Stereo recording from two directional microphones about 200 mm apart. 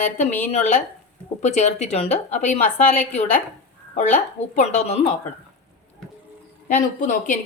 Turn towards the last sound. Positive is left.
turn(degrees=40)  # may be behind; listen again after turning